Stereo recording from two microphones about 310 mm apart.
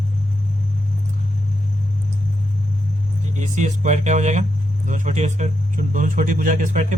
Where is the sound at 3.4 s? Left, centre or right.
Right.